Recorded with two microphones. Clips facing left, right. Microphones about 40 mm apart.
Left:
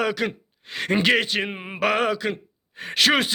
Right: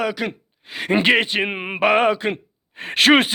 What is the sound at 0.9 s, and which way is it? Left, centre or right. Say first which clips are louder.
Speech: right 3 dB; right.